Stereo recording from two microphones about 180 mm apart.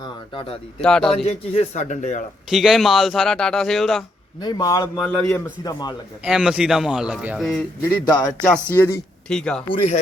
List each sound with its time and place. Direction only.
0.8 s a man's voice: 5° left (ahead or behind)
1.1 s a man's voice: 35° left (ahead or behind)
2.5 s a man's voice: centre (ahead or behind)
4.4 s a man's voice: 20° left (ahead or behind)
4.9 s a man's voice: 5° left (ahead or behind)
5.2 s a man's voice: 20° left (ahead or behind)
6.2 s a man's voice: 5° right (ahead or behind)
8.0 s a man's voice: 20° left (ahead or behind); by 9.7 s 5° left (ahead or behind)